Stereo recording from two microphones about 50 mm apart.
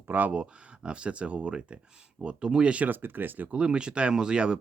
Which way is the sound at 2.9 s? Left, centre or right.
Right.